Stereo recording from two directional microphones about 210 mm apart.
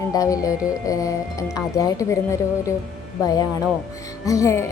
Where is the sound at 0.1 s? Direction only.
15° left (ahead or behind).